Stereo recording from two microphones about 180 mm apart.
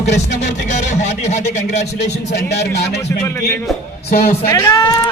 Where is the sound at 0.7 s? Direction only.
40° left (ahead or behind).